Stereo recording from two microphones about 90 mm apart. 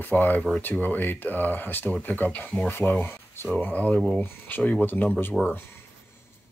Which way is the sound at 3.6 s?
15° left (ahead or behind).